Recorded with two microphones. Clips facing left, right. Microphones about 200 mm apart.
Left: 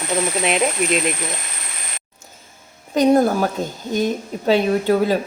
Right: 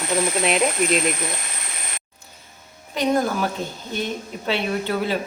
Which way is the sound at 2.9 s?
45° left (ahead or behind).